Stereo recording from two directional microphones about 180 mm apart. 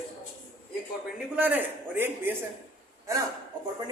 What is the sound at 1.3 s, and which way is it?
A man's voice, 10° right (ahead or behind).